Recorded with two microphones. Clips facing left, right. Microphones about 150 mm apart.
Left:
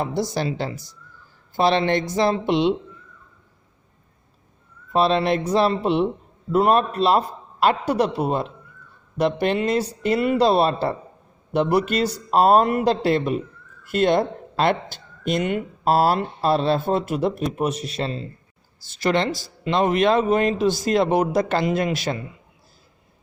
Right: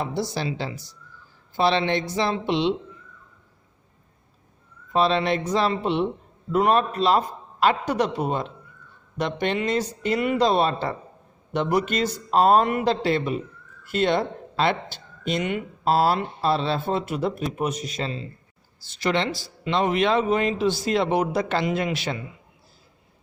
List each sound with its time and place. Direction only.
0.0 s speech: 50° left (ahead or behind)
5.0 s a man's voice: 40° left (ahead or behind)
5.8 s speech: centre (ahead or behind)
6.5 s a man's voice: 35° left (ahead or behind)
9.4 s a man's voice: 40° left (ahead or behind)
12.3 s a man's voice: 40° left (ahead or behind)